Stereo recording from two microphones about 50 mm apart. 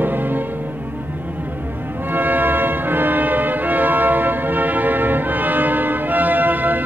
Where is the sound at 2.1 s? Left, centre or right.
Right.